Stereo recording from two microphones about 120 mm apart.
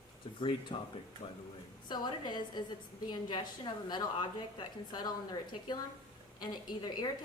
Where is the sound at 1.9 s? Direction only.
40° left (ahead or behind).